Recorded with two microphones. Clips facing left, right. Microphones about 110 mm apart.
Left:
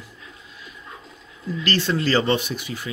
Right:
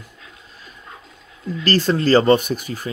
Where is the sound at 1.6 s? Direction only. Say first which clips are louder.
Right 5 dB; 40° right (ahead or behind).